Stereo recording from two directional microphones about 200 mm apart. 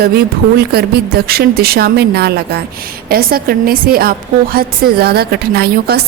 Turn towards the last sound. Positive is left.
turn(degrees=-50)  # may be behind; listen again after turning